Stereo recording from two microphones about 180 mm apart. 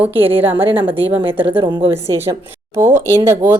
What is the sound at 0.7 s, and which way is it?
Speech, 30° right (ahead or behind).